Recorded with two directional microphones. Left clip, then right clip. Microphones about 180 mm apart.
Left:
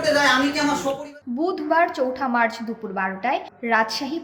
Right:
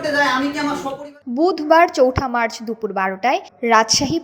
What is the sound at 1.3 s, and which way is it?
A woman's voice, 35° right (ahead or behind).